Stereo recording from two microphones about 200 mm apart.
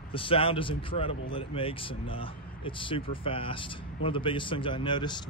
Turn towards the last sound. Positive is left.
turn(degrees=20)  # may be behind; listen again after turning